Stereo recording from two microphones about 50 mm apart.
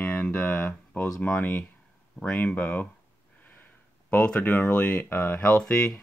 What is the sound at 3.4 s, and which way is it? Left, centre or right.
Sniff, left.